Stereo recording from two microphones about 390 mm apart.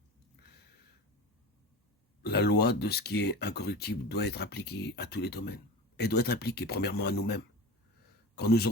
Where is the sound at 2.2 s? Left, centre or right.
Left.